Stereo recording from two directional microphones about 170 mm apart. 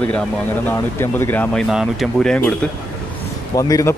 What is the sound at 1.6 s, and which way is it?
Speech, centre (ahead or behind).